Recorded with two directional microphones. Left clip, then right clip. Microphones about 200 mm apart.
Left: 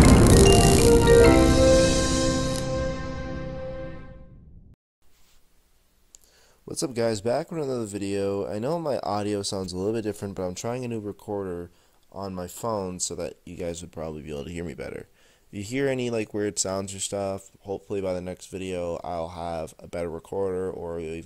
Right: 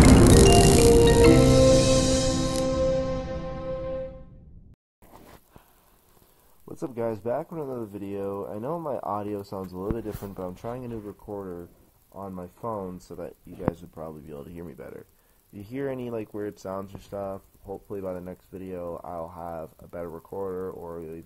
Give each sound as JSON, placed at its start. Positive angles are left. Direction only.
{"t": 0.0, "sound": "music", "side_deg": 0}
{"t": 6.7, "sound": "speech", "side_deg": 40}
{"t": 9.9, "sound": "speech", "side_deg": 35}
{"t": 13.1, "sound": "speech", "side_deg": 40}
{"t": 17.6, "sound": "speech", "side_deg": 30}